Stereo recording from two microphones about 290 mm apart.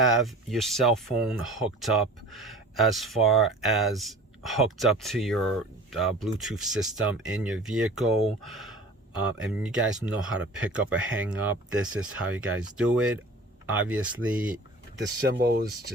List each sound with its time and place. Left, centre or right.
0.0 s speech: centre
15.3 s speech: right